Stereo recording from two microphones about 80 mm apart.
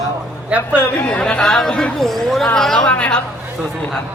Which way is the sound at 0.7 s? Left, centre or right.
Centre.